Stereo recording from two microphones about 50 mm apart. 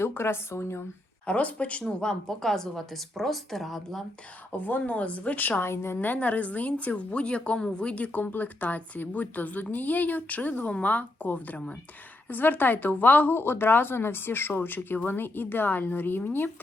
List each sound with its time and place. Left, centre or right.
0.0 s speech: left
1.3 s speech: left
2.0 s speech: centre
4.5 s speech: left
4.9 s speech: left
5.6 s speech: left
6.0 s speech: left